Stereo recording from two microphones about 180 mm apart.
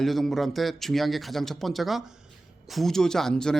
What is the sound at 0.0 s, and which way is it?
Speech, centre (ahead or behind).